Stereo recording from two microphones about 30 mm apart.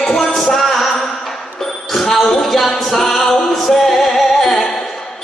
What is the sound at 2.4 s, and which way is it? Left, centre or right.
Music, centre.